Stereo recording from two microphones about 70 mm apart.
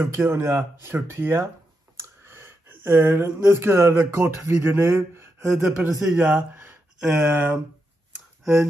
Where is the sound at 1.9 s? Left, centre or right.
Right.